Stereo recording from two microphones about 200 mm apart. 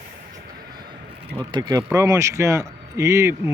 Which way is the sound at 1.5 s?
20° right (ahead or behind).